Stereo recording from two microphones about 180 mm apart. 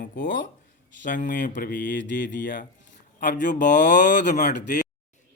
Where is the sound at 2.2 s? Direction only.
50° left (ahead or behind).